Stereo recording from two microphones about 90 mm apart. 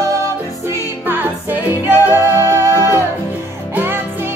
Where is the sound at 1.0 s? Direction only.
20° right (ahead or behind).